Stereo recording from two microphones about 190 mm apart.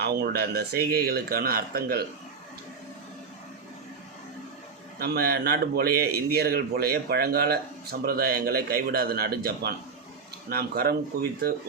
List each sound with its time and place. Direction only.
0.0 s speech: 55° right (ahead or behind)
4.9 s a man's voice: 55° right (ahead or behind)